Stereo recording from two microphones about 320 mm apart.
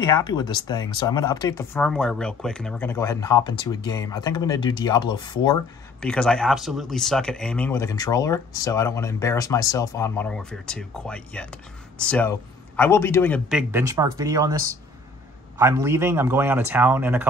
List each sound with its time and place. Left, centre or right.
0.0 s speech: centre
5.9 s a man's voice: centre